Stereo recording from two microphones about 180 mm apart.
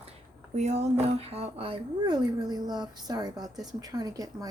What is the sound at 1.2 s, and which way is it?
Speech, 35° right (ahead or behind).